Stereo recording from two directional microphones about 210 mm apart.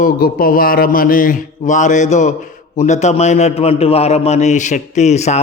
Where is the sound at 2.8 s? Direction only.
35° left (ahead or behind).